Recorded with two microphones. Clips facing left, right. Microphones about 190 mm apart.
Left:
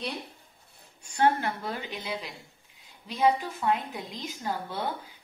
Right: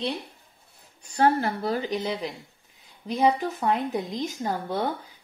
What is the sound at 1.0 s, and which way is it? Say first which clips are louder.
Speech: right 3 dB; 35° right (ahead or behind).